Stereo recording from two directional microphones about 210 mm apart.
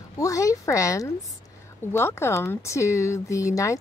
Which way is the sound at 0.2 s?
15° left (ahead or behind).